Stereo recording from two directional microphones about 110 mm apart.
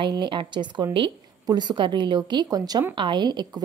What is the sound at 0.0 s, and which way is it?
A woman's voice, 45° right (ahead or behind).